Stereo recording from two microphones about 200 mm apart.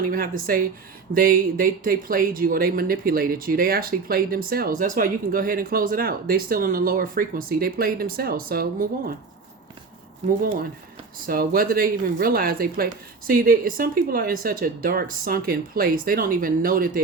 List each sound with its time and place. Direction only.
0.1 s speech: 45° right (ahead or behind)
11.3 s speech: 45° right (ahead or behind)